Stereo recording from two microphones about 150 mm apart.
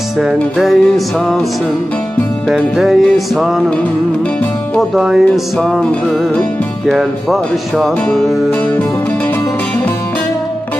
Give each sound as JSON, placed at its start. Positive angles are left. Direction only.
{"t": 0.3, "sound": "music", "side_deg": 0}
{"t": 2.5, "sound": "music", "side_deg": 0}
{"t": 4.9, "sound": "music", "side_deg": -5}